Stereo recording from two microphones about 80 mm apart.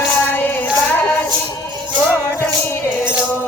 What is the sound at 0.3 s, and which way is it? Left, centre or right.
Child singing, left.